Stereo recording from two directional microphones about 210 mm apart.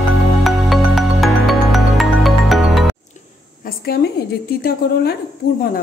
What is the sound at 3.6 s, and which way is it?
A woman's voice, 45° left (ahead or behind).